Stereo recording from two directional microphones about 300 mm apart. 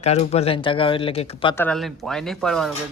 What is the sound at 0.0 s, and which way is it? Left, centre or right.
Speech, left.